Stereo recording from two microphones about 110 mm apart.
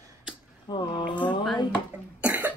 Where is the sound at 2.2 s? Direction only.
15° right (ahead or behind).